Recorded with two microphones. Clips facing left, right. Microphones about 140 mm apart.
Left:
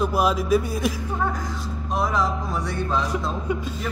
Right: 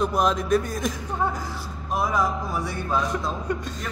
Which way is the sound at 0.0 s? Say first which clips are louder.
Left 1 dB; 5° left (ahead or behind).